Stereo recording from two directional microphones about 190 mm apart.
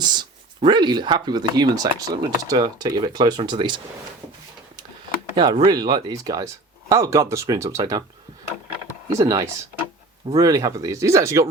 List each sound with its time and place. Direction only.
0.0 s speech: 20° right (ahead or behind)
5.4 s speech: 25° right (ahead or behind)
9.1 s speech: 15° right (ahead or behind)